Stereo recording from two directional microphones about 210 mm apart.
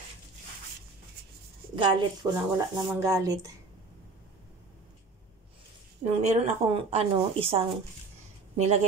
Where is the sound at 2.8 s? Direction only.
15° right (ahead or behind).